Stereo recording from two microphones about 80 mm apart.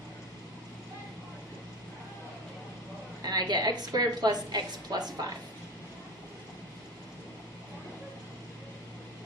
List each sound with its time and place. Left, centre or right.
3.2 s a woman's voice: right